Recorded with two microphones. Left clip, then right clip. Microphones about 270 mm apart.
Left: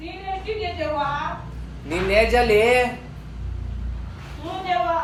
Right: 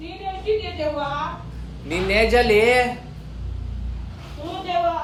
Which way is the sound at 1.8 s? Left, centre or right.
Centre.